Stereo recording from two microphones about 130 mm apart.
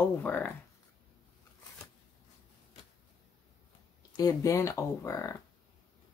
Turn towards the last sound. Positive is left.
turn(degrees=25)  # may be behind; listen again after turning